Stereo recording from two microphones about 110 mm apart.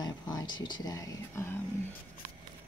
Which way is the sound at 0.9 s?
30° left (ahead or behind).